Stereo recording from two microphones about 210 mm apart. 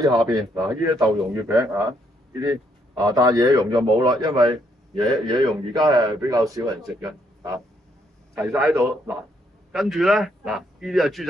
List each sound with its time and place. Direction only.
0.0 s a man's voice: 15° right (ahead or behind)
8.7 s a man's voice: centre (ahead or behind)